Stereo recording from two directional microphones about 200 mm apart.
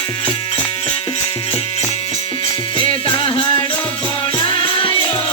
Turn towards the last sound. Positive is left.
turn(degrees=25)  # may be behind; listen again after turning